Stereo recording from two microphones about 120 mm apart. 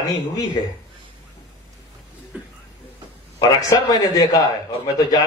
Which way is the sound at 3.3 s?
35° left (ahead or behind).